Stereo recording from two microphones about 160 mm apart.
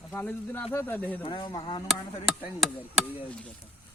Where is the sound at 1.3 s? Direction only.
30° left (ahead or behind).